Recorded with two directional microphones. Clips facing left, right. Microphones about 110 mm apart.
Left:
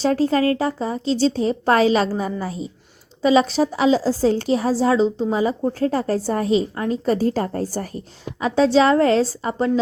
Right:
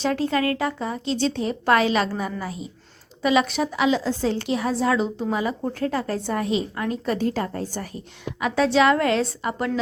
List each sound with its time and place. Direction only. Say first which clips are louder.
0.0 s speech: left 5 dB; 35° left (ahead or behind)
8.4 s speech: left 3 dB; 30° left (ahead or behind)